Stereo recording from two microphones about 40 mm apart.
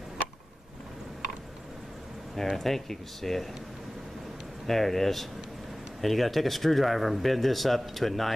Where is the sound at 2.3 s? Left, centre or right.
Centre.